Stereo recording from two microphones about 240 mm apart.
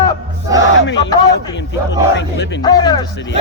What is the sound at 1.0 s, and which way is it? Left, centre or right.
Speech, centre.